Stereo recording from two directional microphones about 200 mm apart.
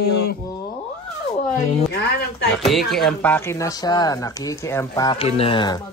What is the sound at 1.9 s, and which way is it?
Speech, 60° left (ahead or behind).